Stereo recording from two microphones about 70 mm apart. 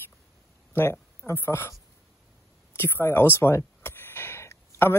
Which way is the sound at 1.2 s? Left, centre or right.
Left.